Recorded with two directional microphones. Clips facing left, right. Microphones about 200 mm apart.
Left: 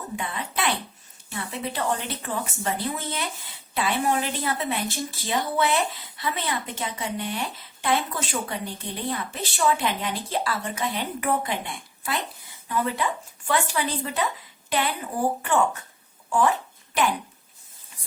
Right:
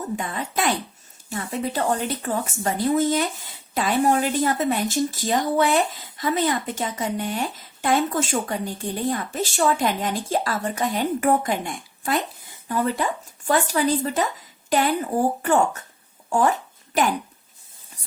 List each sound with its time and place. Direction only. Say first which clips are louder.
0.2 s a woman's voice: right 3 dB; 45° right (ahead or behind)